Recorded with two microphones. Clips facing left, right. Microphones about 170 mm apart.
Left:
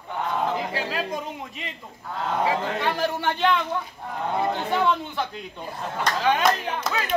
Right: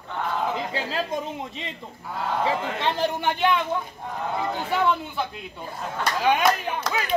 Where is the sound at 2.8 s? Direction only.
20° right (ahead or behind).